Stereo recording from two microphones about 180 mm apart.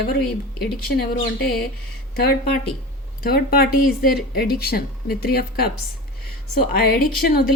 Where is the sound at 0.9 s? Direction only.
60° left (ahead or behind).